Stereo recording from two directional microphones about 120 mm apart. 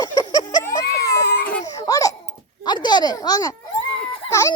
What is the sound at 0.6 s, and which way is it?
Baby cry, 25° left (ahead or behind).